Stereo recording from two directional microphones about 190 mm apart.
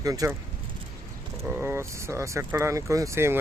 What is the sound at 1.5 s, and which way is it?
Speech, 10° right (ahead or behind).